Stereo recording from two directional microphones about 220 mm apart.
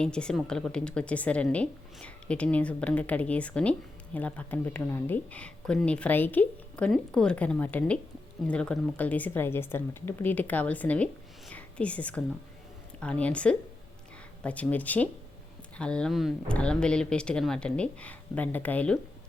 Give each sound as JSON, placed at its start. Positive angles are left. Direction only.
{"t": 0.0, "sound": "a woman's voice", "side_deg": 5}